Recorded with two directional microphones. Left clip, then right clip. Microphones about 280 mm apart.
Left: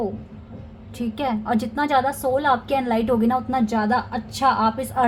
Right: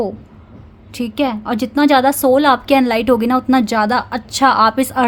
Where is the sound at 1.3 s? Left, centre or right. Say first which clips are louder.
Right 2 dB; right.